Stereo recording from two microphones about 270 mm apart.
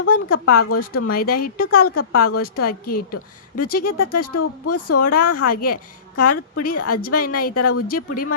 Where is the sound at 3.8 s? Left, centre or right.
Left.